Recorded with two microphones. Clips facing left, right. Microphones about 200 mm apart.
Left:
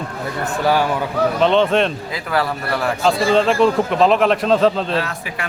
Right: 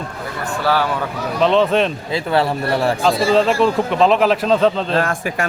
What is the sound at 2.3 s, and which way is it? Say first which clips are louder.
Speech: right 3 dB; 25° right (ahead or behind).